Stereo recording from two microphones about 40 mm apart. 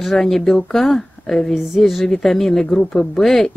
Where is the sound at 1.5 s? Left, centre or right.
Centre.